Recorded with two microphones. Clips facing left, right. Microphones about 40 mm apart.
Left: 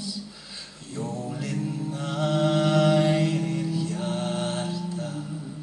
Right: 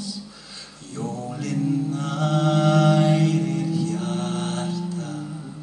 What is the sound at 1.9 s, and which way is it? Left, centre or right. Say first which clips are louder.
Mantra: right 2 dB; centre.